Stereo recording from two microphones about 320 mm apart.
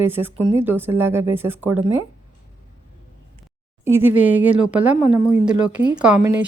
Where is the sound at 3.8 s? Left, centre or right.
Centre.